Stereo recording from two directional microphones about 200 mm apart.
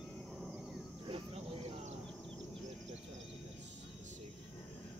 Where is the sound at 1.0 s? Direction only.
30° right (ahead or behind).